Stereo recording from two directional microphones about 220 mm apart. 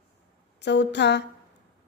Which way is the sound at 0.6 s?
50° left (ahead or behind).